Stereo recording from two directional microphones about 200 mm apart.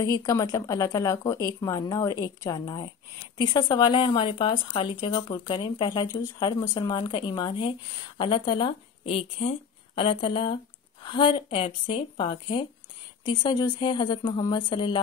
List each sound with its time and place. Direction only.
0.0 s a woman's voice: 15° left (ahead or behind)